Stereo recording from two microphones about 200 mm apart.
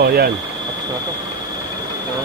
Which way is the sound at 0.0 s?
50° right (ahead or behind).